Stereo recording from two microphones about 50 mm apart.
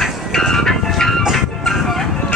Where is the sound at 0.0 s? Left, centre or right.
Centre.